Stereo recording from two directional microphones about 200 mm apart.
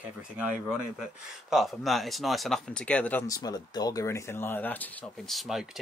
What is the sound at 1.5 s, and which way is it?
Speech, centre (ahead or behind).